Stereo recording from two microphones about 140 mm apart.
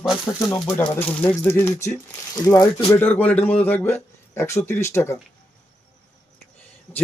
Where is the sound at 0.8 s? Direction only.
10° left (ahead or behind).